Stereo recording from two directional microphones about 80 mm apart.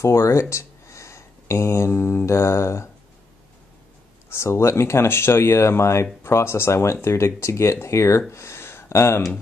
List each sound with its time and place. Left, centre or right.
0.0 s speech: left
4.3 s speech: left